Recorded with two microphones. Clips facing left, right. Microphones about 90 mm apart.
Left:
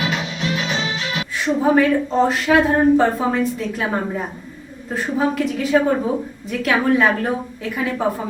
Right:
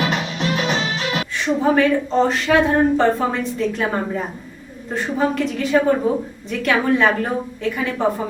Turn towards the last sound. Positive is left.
turn(degrees=0)  # may be behind; listen again after turning